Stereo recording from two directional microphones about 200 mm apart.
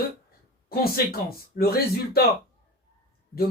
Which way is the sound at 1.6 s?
50° left (ahead or behind).